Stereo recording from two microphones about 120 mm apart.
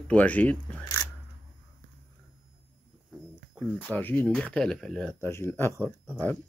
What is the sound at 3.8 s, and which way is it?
Speech, 15° left (ahead or behind).